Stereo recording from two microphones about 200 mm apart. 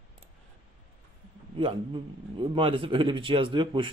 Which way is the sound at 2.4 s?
25° right (ahead or behind).